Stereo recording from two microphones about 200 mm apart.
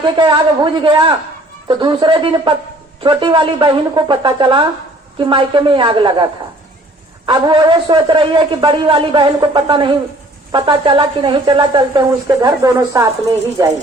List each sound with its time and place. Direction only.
0.0 s a man's voice: 25° right (ahead or behind)
7.3 s a man's voice: 25° right (ahead or behind)